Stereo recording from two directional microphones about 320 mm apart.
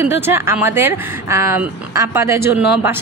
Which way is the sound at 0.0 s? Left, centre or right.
Centre.